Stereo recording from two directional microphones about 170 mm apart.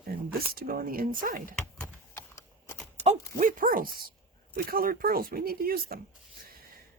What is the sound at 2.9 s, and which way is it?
Speech, 45° right (ahead or behind).